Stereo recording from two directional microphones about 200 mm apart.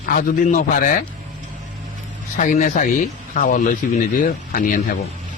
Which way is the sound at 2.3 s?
40° left (ahead or behind).